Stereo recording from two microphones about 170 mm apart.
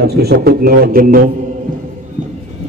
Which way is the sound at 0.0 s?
70° right (ahead or behind).